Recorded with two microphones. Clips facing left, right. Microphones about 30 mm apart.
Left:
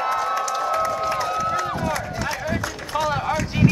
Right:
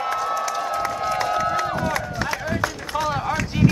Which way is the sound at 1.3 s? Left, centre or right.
Right.